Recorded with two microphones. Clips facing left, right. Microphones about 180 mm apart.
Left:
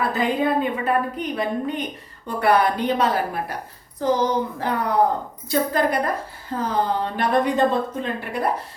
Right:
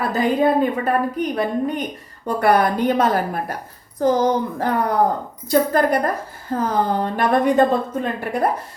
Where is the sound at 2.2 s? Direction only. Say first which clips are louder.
Right 2 dB; 45° right (ahead or behind).